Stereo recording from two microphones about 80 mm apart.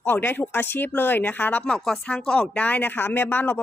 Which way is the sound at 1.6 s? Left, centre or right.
Centre.